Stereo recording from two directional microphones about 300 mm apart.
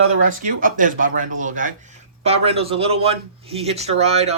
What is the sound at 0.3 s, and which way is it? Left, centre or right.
A man's voice, right.